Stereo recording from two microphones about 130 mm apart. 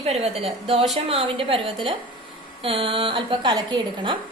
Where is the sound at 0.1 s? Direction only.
50° right (ahead or behind).